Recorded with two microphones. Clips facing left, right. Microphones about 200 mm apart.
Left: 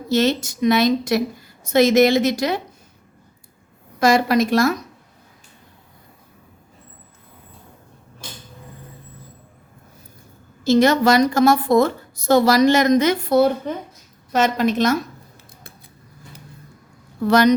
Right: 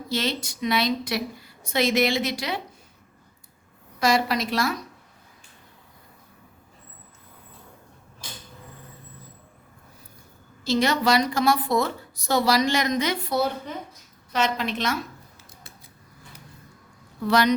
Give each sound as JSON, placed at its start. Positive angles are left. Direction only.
{"t": 0.1, "sound": "a woman's voice", "side_deg": 45}
{"t": 4.0, "sound": "a woman's voice", "side_deg": 50}
{"t": 10.6, "sound": "a woman's voice", "side_deg": 45}
{"t": 17.2, "sound": "a woman's voice", "side_deg": 45}